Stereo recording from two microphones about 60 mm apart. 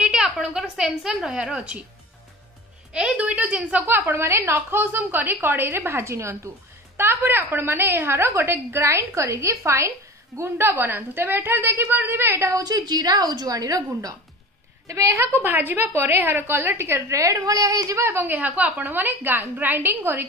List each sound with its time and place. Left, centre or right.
0.0 s a woman's voice: centre
2.9 s a woman's voice: centre
4.0 s a woman's voice: right
4.9 s a woman's voice: right
7.0 s a woman's voice: right
10.6 s a woman's voice: right
12.4 s speech: right
14.9 s a woman's voice: right
15.4 s a woman's voice: right
17.1 s a woman's voice: right
18.0 s a woman's voice: right
18.3 s a woman's voice: right